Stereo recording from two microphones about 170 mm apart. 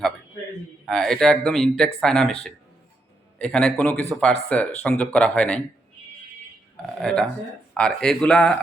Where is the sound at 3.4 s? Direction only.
5° left (ahead or behind).